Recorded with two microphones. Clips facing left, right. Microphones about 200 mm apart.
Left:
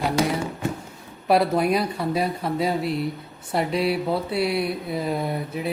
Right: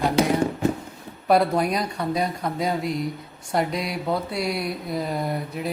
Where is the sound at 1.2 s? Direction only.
5° left (ahead or behind).